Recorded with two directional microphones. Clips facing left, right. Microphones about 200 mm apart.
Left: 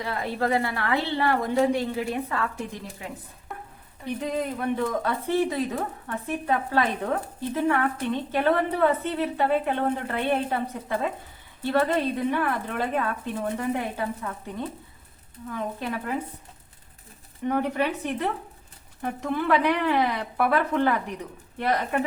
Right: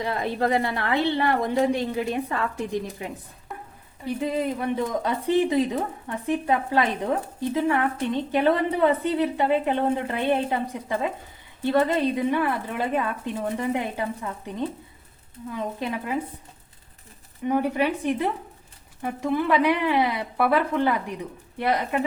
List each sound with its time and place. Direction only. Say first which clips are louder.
0.0 s a woman's voice: right 3 dB; 20° right (ahead or behind)
3.5 s a sound: right 1 dB; centre (ahead or behind)
4.0 s speech: right 3 dB; 5° right (ahead or behind)
4.7 s speech: right 1 dB; 15° right (ahead or behind)
15.5 s speech: right 1 dB; 15° right (ahead or behind)
17.4 s speech: right 2 dB; 10° right (ahead or behind)